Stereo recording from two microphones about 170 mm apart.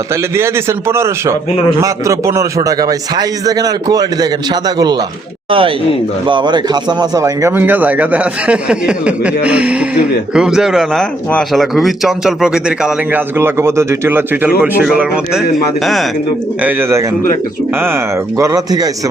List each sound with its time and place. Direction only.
0.1 s a man's voice: 15° right (ahead or behind); by 16.0 s centre (ahead or behind)
16.6 s speech: 10° right (ahead or behind)